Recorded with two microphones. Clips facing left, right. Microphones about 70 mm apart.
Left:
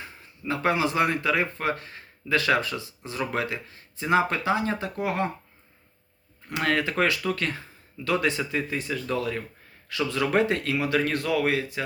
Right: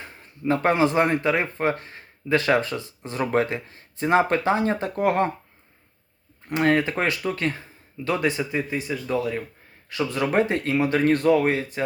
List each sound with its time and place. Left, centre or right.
0.0 s speech: right
6.5 s speech: right
9.9 s speech: right